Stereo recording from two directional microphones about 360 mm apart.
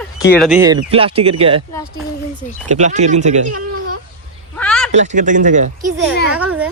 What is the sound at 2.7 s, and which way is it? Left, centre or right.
Speech, centre.